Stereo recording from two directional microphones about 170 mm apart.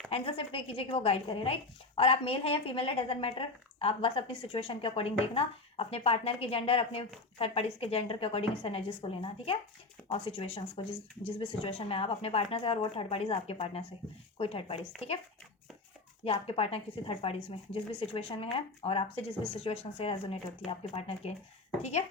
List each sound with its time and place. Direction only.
0.1 s a woman's voice: 35° left (ahead or behind)
16.2 s a woman's voice: 35° left (ahead or behind)